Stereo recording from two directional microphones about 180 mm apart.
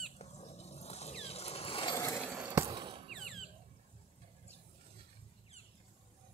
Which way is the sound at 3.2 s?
Centre (ahead or behind).